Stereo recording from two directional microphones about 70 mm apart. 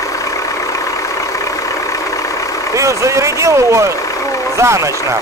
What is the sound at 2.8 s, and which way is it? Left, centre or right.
Speech, right.